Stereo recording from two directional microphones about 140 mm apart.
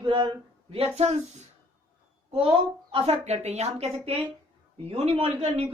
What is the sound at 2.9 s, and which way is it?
A woman's voice, 50° right (ahead or behind).